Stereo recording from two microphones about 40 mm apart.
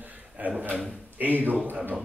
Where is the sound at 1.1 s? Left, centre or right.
Right.